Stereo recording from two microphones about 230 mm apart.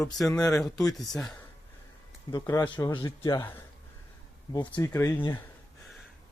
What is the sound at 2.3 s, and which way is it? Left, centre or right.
Speech, centre.